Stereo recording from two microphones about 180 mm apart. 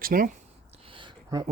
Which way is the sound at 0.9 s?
25° right (ahead or behind).